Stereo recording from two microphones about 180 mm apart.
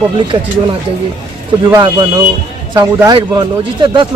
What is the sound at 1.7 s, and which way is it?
Speech, 20° right (ahead or behind).